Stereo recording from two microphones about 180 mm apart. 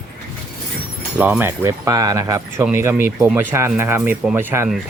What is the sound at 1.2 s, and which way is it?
Speech, 10° right (ahead or behind).